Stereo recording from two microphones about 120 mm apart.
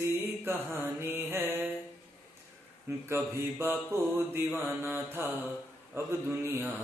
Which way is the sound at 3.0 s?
20° right (ahead or behind).